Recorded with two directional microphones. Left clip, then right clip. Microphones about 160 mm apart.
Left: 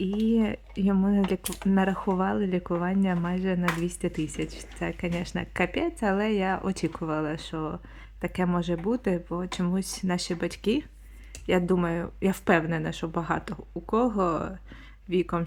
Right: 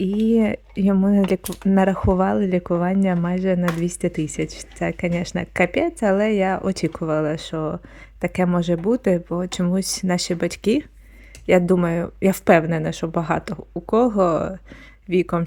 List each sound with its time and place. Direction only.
0.2 s speech: 40° right (ahead or behind)